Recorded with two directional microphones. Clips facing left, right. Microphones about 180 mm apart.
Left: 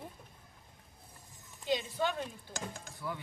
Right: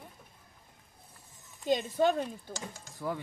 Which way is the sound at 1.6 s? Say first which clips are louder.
Right 6 dB; 45° right (ahead or behind).